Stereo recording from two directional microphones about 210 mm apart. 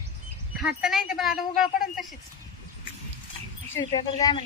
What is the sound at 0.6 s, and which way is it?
Speech, centre (ahead or behind).